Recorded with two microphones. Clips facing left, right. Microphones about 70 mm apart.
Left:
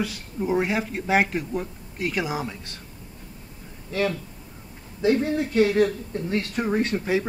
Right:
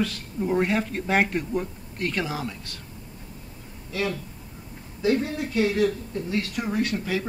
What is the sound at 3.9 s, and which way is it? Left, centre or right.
Speech, left.